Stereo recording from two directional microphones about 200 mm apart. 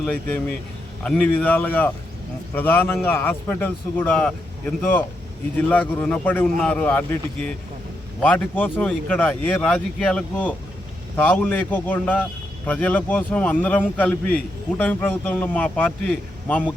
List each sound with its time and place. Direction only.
0.0 s a man's voice: 5° left (ahead or behind)